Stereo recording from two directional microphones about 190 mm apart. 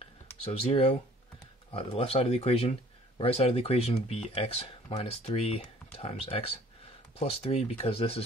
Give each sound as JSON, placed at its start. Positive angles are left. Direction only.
{"t": 0.5, "sound": "speech", "side_deg": 30}